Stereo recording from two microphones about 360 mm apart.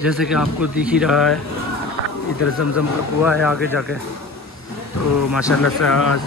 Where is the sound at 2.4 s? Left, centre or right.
Left.